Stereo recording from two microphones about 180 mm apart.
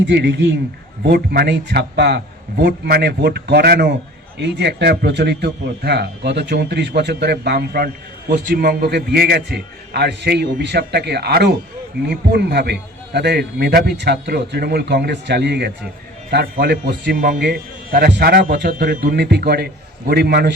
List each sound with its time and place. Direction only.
0.0 s a man's voice: 70° right (ahead or behind)